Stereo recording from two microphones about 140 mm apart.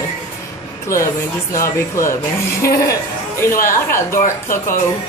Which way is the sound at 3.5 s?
80° left.